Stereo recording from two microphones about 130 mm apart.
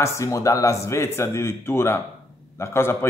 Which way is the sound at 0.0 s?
25° left (ahead or behind).